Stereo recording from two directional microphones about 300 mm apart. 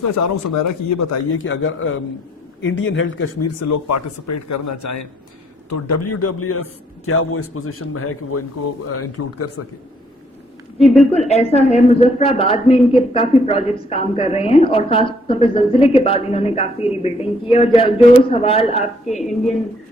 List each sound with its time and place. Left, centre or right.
0.5 s speech: left
1.2 s speech: left
3.6 s a man's voice: left
10.8 s a woman's voice: centre
11.3 s a woman's voice: left
12.8 s a woman's voice: centre
13.1 s a woman's voice: centre
19.0 s a woman's voice: centre